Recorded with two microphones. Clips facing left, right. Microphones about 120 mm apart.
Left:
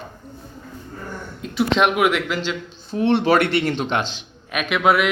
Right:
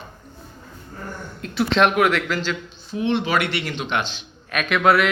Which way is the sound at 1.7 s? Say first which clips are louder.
Right 1 dB; 10° left (ahead or behind).